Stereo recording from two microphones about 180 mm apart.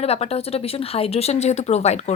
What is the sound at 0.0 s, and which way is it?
A woman's voice, 35° left (ahead or behind).